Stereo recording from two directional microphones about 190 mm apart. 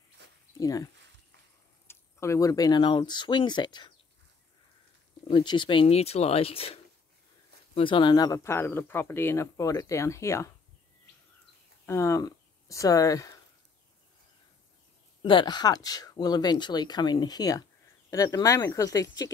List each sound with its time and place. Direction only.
0.2 s a sound: 65° right (ahead or behind)
0.6 s speech: 20° left (ahead or behind)
1.9 s speech: 15° left (ahead or behind)
5.2 s speech: 25° left (ahead or behind)
11.8 s speech: 15° left (ahead or behind)
15.2 s speech: 25° left (ahead or behind)